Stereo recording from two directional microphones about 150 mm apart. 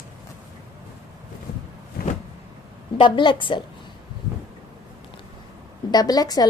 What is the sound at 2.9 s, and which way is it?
Speech, 30° left (ahead or behind).